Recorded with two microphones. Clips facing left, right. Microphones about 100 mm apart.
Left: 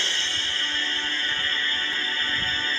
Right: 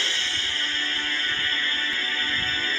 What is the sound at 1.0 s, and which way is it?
Music, 35° left (ahead or behind).